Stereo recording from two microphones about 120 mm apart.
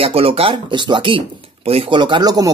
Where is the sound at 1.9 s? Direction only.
40° right (ahead or behind).